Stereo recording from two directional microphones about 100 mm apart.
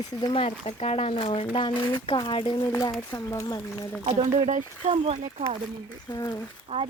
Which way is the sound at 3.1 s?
30° left (ahead or behind).